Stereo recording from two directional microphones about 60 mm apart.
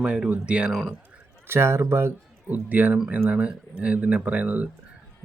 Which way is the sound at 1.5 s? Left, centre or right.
Right.